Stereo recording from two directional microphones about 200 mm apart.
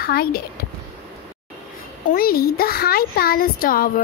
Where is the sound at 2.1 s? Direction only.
50° left (ahead or behind).